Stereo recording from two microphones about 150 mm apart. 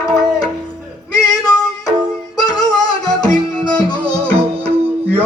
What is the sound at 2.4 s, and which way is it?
Music, 25° left (ahead or behind).